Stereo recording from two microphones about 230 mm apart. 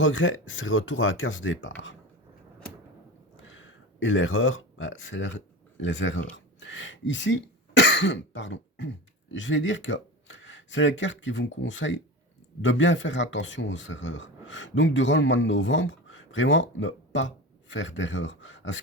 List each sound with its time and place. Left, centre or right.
0.0 s speech: left
3.4 s a sound: left
6.3 s speech: left